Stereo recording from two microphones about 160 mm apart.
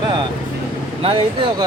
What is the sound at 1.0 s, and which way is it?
Speech, 30° right (ahead or behind).